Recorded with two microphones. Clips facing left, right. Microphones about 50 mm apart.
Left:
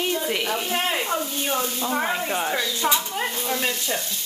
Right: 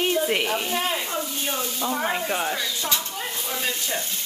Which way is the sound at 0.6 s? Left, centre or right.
Left.